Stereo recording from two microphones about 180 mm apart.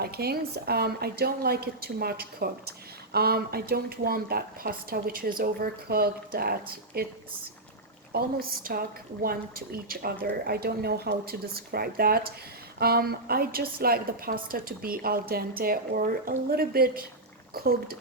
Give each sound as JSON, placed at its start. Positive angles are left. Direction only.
{"t": 0.0, "sound": "a woman's voice", "side_deg": -60}
{"t": 8.1, "sound": "a woman's voice", "side_deg": -55}